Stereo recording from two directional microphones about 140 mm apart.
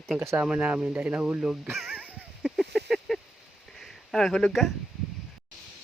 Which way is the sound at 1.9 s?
10° right (ahead or behind).